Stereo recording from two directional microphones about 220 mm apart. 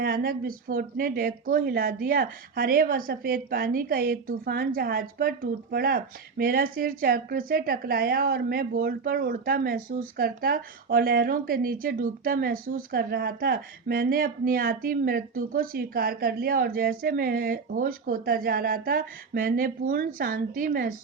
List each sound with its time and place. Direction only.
0.0 s speech: 45° right (ahead or behind)